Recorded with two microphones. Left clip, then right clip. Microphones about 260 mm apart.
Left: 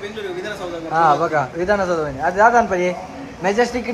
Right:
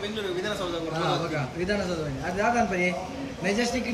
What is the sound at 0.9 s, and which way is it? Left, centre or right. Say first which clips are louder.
A man's voice: left 15 dB; right.